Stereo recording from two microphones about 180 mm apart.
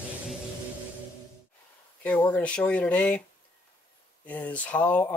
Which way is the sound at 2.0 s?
10° left (ahead or behind).